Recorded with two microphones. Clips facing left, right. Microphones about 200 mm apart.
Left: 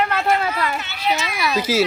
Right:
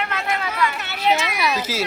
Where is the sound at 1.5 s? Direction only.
10° left (ahead or behind).